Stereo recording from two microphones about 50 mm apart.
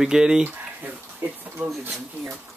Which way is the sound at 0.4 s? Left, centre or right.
Right.